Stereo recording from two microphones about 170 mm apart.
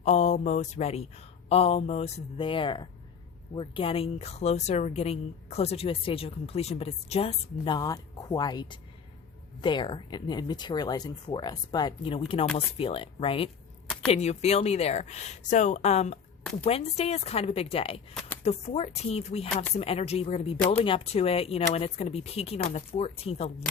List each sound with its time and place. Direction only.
0.0 s a woman's voice: 40° left (ahead or behind)
16.4 s speech: 5° left (ahead or behind)
16.6 s a woman's voice: 40° left (ahead or behind)
18.1 s a sound: centre (ahead or behind)
18.4 s a woman's voice: 40° left (ahead or behind)